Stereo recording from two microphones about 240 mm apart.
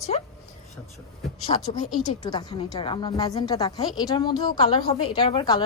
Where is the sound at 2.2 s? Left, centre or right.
Centre.